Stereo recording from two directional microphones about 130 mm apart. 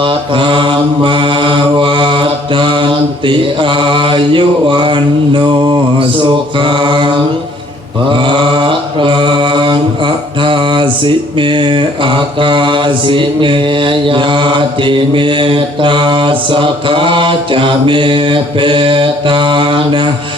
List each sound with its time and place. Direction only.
0.0 s mantra: 40° right (ahead or behind)
8.1 s mantra: 40° right (ahead or behind)